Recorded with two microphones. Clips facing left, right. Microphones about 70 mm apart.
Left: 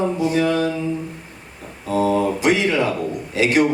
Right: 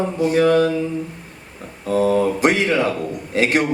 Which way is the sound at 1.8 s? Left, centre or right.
Right.